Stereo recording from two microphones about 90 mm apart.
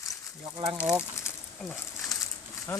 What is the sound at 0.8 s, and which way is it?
Speech, 15° right (ahead or behind).